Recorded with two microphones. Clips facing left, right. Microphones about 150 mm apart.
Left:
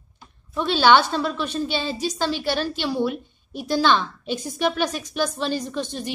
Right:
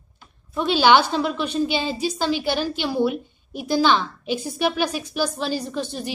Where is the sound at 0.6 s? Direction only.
10° right (ahead or behind).